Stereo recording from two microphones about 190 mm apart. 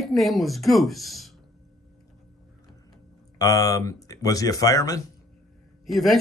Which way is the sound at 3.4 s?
20° left (ahead or behind).